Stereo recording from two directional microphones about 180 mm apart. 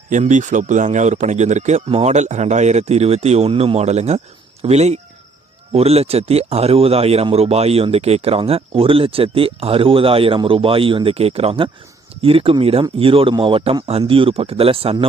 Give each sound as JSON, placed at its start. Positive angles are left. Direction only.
{"t": 0.1, "sound": "speech", "side_deg": -45}